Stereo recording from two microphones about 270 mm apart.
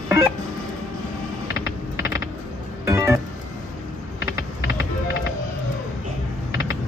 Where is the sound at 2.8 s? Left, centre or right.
Centre.